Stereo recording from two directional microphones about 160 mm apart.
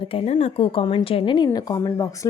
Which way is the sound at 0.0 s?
35° left (ahead or behind).